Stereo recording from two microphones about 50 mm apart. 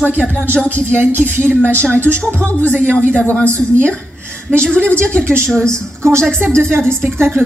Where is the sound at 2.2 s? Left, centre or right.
Left.